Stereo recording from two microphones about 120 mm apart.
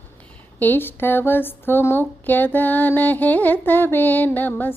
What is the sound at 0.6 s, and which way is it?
A woman's voice, 15° left (ahead or behind).